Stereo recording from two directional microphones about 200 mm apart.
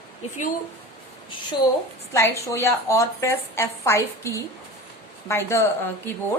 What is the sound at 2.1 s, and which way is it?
A woman's voice, 15° left (ahead or behind).